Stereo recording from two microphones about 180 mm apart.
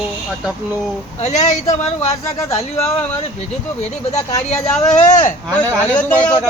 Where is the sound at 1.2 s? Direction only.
40° left (ahead or behind).